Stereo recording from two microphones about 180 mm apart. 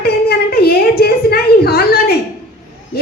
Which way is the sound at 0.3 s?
60° left (ahead or behind).